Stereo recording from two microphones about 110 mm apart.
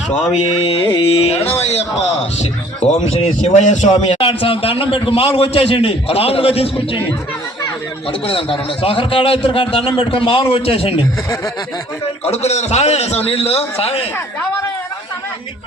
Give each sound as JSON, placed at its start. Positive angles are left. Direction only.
{"t": 0.1, "sound": "speech", "side_deg": 5}
{"t": 0.3, "sound": "a man's voice", "side_deg": 60}
{"t": 0.9, "sound": "a man's voice", "side_deg": 50}
{"t": 4.3, "sound": "a man's voice", "side_deg": 55}
{"t": 8.3, "sound": "a man's voice", "side_deg": 55}
{"t": 12.2, "sound": "a man's voice", "side_deg": 75}
{"t": 13.2, "sound": "a man's voice", "side_deg": 65}